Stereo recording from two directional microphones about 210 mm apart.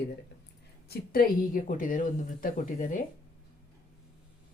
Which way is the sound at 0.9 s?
45° left (ahead or behind).